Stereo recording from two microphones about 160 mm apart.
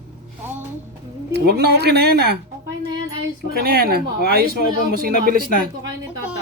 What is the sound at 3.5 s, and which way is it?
Speech, 70° right (ahead or behind).